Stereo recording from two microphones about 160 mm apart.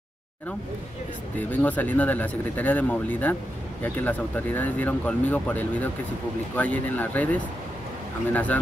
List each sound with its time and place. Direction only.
1.4 s speech: 10° left (ahead or behind)